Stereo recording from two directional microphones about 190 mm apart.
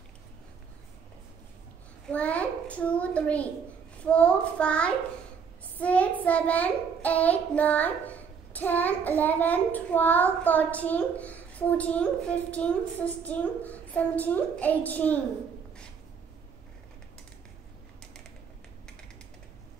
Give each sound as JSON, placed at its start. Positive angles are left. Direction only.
{"t": 2.0, "sound": "child singing", "side_deg": 5}